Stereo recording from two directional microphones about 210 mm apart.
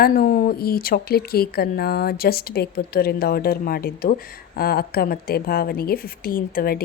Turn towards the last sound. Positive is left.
turn(degrees=45)  # may be behind; listen again after turning